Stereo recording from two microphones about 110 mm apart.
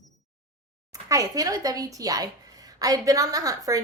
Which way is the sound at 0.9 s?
30° right (ahead or behind).